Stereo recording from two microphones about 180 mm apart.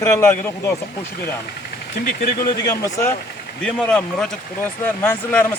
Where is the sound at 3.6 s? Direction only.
5° left (ahead or behind).